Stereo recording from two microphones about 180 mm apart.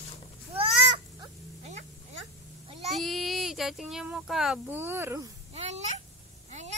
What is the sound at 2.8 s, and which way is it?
Speech, centre (ahead or behind).